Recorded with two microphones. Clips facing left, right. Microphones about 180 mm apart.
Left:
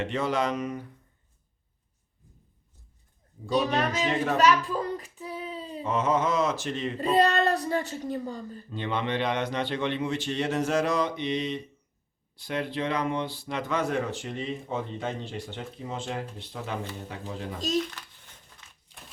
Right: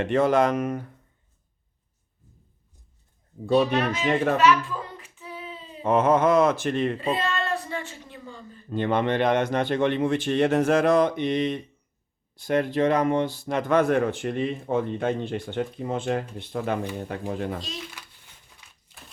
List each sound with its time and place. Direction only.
0.0 s speech: 50° right (ahead or behind)
3.4 s speech: 50° right (ahead or behind)
4.4 s a sound: 40° left (ahead or behind)
5.8 s speech: 55° right (ahead or behind)
7.0 s a woman's voice: 40° left (ahead or behind)
8.7 s speech: 50° right (ahead or behind)